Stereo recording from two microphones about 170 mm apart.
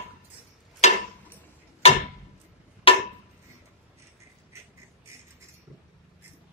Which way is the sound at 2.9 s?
30° left (ahead or behind).